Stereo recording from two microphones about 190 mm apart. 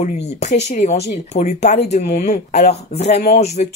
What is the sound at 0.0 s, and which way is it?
Speech, 35° left (ahead or behind).